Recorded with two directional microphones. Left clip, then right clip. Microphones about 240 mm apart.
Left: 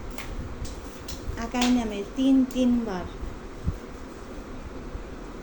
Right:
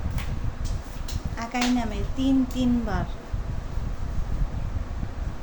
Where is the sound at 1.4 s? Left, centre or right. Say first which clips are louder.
Even; centre.